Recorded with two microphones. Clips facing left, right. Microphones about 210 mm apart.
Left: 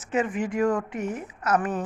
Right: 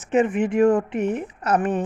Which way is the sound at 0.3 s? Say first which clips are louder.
Right 6 dB; 60° right (ahead or behind).